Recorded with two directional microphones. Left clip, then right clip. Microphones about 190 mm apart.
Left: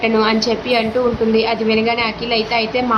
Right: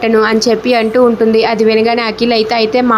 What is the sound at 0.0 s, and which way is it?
A woman's voice, 35° right (ahead or behind).